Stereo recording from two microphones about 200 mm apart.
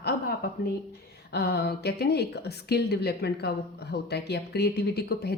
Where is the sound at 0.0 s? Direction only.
50° left (ahead or behind).